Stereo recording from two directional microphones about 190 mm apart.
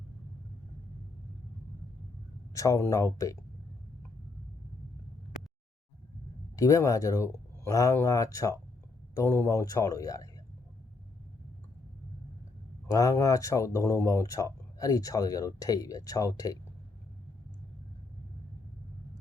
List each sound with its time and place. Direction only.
2.5 s speech: 15° left (ahead or behind)
6.6 s speech: 15° left (ahead or behind)
12.9 s speech: 15° left (ahead or behind)